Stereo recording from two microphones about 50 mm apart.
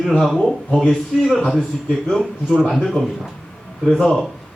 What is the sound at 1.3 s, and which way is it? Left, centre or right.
Speech, centre.